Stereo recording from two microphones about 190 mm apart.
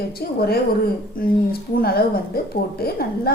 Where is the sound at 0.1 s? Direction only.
55° left (ahead or behind).